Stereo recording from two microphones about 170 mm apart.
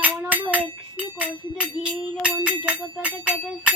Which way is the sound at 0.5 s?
10° right (ahead or behind).